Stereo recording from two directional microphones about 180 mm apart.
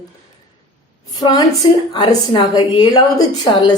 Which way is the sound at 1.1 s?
25° left (ahead or behind).